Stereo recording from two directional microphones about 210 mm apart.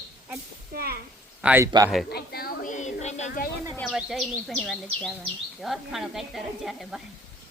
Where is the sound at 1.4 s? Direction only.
10° right (ahead or behind).